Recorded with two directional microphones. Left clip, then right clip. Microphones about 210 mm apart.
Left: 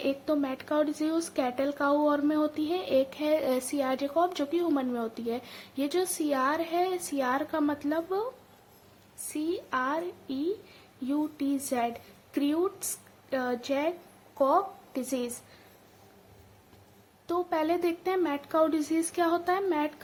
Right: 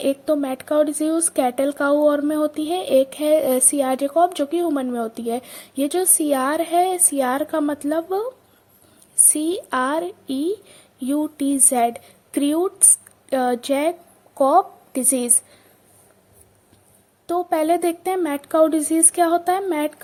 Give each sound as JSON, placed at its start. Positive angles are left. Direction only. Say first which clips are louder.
{"t": 0.0, "sound": "speech", "louder": "right 9 dB", "side_deg": -30}
{"t": 9.3, "sound": "a woman's voice", "louder": "right 5 dB", "side_deg": -35}
{"t": 17.2, "sound": "speech", "louder": "right 9 dB", "side_deg": -25}